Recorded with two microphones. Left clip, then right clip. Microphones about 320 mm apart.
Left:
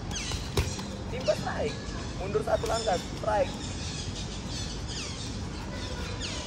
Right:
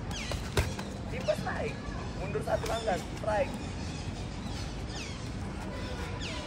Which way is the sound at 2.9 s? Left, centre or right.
Left.